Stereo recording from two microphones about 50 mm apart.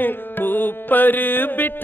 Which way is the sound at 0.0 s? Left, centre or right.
Left.